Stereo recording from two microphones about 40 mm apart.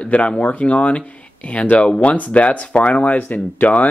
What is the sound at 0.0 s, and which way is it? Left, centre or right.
Speech, left.